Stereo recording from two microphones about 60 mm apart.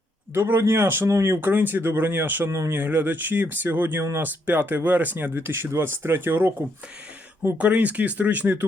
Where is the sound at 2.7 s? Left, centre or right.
Right.